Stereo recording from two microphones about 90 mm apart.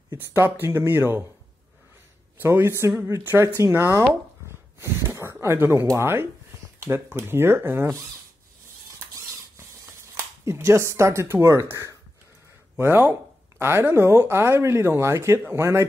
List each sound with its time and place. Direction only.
0.1 s speech: 25° right (ahead or behind)
2.3 s speech: 25° right (ahead or behind)
4.5 s a sound: 30° right (ahead or behind)
5.9 s speech: 25° right (ahead or behind)
9.6 s a sound: 30° right (ahead or behind)
12.7 s speech: 25° right (ahead or behind)